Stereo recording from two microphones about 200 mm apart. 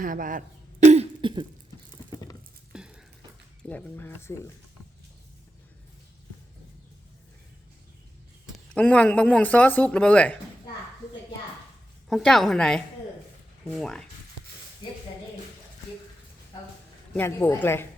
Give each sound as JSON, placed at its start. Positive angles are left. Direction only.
{"t": 0.0, "sound": "speech", "side_deg": -40}
{"t": 0.9, "sound": "cough", "side_deg": -30}
{"t": 2.0, "sound": "patter", "side_deg": 20}
{"t": 2.7, "sound": "a sound", "side_deg": -5}
{"t": 3.7, "sound": "speech", "side_deg": 5}
{"t": 8.5, "sound": "speech", "side_deg": 5}
{"t": 12.0, "sound": "a woman's voice", "side_deg": 0}
{"t": 17.2, "sound": "speech", "side_deg": 10}